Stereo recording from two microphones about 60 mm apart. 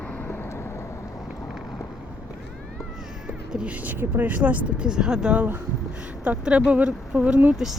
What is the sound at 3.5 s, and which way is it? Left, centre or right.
Music, centre.